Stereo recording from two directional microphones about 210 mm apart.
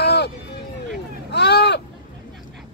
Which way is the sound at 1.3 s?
55° left (ahead or behind).